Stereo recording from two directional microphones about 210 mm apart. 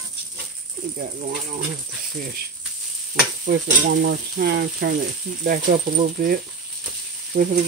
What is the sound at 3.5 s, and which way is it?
Sizzle, 50° right (ahead or behind).